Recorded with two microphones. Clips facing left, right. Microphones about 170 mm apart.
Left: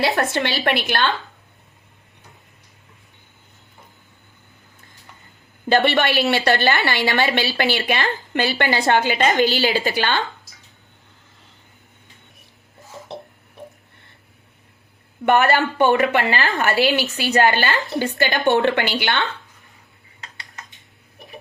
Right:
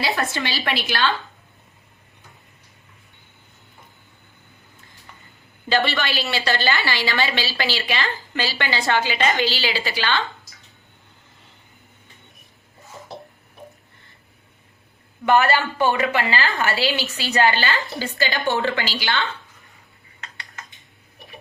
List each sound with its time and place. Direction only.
0.3 s a woman's voice: 55° left (ahead or behind)
5.6 s a woman's voice: 55° left (ahead or behind)
15.3 s a woman's voice: 55° left (ahead or behind)